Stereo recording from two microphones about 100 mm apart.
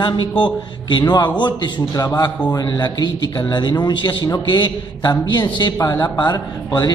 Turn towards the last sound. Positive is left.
turn(degrees=50)  # may be behind; listen again after turning